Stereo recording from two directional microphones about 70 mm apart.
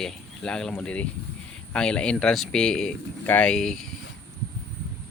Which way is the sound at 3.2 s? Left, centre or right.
Left.